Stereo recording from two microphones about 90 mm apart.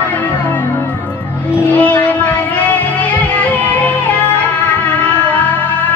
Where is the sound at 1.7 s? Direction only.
20° left (ahead or behind).